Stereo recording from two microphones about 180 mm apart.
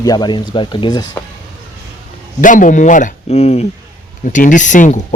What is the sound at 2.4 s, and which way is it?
Speech, 45° left (ahead or behind).